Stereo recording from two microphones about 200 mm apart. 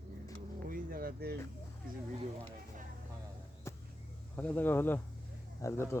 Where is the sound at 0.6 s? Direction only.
45° right (ahead or behind).